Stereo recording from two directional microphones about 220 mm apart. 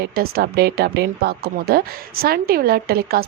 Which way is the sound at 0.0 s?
45° right (ahead or behind).